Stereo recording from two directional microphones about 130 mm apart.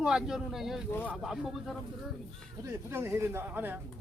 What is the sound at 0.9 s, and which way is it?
Speech, 15° left (ahead or behind).